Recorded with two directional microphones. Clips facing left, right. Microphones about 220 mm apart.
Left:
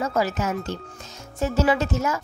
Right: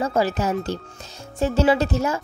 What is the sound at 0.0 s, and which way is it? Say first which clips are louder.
Speech: right 3 dB; 30° right (ahead or behind).